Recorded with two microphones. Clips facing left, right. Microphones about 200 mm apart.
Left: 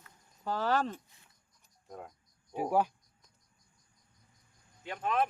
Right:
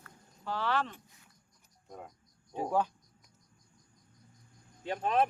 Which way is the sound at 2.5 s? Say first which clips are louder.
Left 1 dB; 10° left (ahead or behind).